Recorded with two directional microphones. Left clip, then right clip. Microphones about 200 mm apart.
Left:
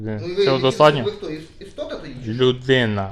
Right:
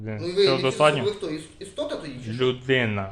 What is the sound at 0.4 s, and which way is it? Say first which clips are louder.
Speech: left 5 dB; 20° left (ahead or behind).